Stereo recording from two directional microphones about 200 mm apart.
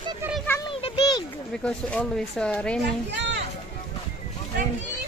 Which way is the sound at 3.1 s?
60° right (ahead or behind).